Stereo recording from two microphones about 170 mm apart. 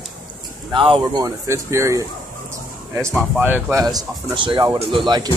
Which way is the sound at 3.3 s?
10° right (ahead or behind).